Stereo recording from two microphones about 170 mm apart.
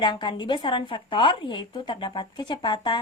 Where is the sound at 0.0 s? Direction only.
25° left (ahead or behind).